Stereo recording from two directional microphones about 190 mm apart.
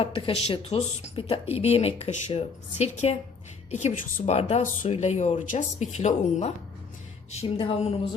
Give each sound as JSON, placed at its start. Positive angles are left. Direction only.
{"t": 0.0, "sound": "a woman's voice", "side_deg": 30}
{"t": 7.5, "sound": "a woman's voice", "side_deg": 30}